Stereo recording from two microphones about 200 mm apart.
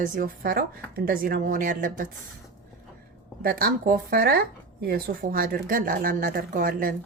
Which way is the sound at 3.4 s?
45° right (ahead or behind).